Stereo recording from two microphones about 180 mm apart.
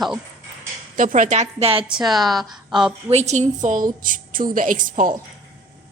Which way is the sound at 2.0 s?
Centre (ahead or behind).